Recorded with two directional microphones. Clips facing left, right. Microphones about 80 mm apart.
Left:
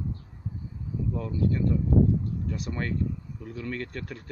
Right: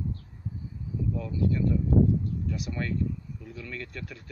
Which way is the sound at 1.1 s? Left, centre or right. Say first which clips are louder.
Left 1 dB; left.